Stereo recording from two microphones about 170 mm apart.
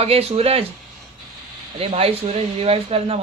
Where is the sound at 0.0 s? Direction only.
35° right (ahead or behind).